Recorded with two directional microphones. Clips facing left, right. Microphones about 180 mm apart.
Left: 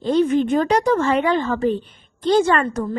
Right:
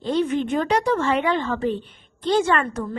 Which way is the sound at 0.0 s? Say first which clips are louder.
Left 5 dB; 40° left (ahead or behind).